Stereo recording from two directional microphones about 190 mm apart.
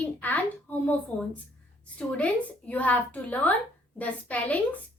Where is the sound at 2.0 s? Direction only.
5° left (ahead or behind).